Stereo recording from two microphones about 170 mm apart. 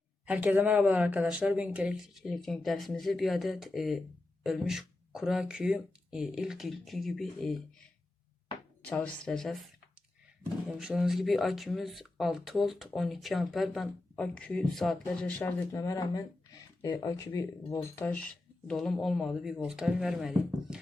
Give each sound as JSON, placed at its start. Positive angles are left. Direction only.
{"t": 0.3, "sound": "speech", "side_deg": -10}
{"t": 8.8, "sound": "speech", "side_deg": 10}
{"t": 10.8, "sound": "speech", "side_deg": -5}